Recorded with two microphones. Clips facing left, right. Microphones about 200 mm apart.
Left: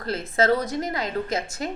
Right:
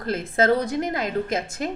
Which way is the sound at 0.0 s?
50° right (ahead or behind).